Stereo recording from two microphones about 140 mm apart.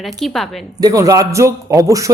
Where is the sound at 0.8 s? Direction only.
25° right (ahead or behind).